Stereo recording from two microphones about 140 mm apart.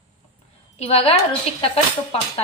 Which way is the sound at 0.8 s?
45° left (ahead or behind).